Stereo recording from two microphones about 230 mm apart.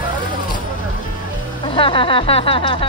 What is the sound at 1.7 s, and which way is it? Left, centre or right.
Speech, left.